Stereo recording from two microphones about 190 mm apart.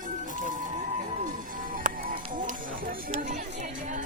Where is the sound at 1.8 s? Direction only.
45° right (ahead or behind).